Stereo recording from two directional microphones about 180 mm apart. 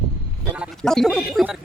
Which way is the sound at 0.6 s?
Centre (ahead or behind).